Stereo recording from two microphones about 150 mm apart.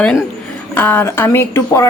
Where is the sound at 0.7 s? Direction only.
15° left (ahead or behind).